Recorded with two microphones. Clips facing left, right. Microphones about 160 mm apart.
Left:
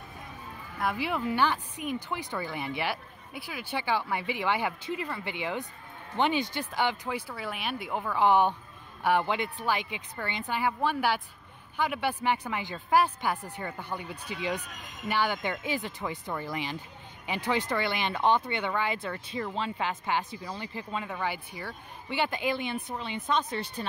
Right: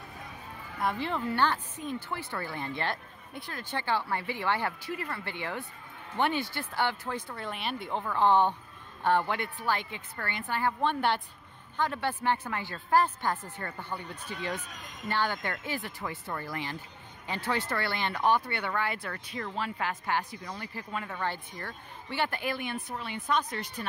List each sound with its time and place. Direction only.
0.7 s speech: 5° left (ahead or behind); by 23.9 s 25° left (ahead or behind)